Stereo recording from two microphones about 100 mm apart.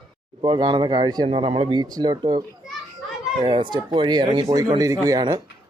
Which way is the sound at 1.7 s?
45° right (ahead or behind).